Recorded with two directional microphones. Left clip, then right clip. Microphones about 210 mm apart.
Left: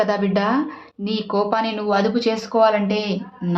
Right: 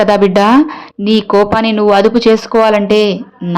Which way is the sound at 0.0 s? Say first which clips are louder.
Right 11 dB; 40° right (ahead or behind).